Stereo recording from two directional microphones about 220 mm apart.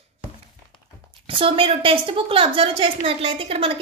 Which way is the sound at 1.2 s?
25° right (ahead or behind).